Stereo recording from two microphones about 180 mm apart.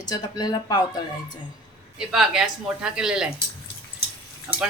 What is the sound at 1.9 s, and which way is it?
Speech, 5° right (ahead or behind).